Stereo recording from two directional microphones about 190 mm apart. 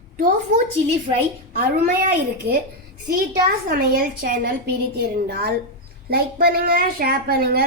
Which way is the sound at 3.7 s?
50° right (ahead or behind).